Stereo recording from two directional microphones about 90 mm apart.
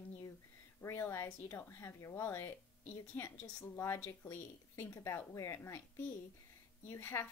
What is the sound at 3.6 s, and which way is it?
Speech, 30° left (ahead or behind).